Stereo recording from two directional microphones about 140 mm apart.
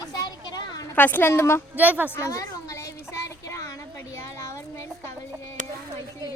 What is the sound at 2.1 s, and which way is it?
Speech, 20° left (ahead or behind).